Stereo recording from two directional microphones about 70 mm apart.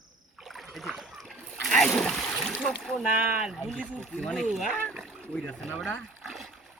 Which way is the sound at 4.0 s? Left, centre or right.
Centre.